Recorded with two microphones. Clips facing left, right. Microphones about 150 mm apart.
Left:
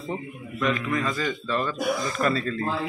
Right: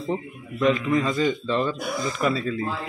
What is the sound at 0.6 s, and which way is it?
A man's voice, 25° right (ahead or behind).